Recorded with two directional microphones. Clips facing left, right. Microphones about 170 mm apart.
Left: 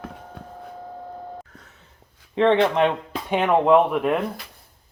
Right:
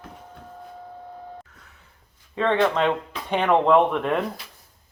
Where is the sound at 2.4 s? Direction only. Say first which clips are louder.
Left 3 dB; 20° left (ahead or behind).